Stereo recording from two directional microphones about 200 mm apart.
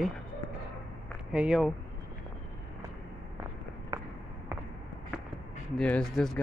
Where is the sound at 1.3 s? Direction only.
5° right (ahead or behind).